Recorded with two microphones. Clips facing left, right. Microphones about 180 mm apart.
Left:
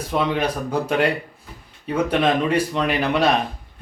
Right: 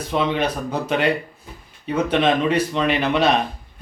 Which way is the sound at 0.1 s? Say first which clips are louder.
Right 1 dB; 10° left (ahead or behind).